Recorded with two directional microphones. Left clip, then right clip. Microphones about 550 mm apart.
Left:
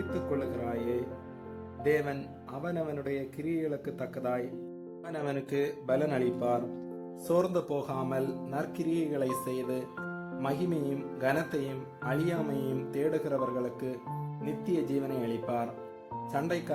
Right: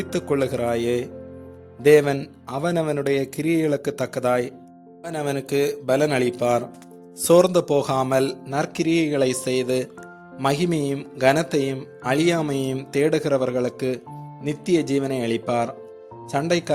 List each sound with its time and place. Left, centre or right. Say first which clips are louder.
0.1 s speech: right 12 dB; centre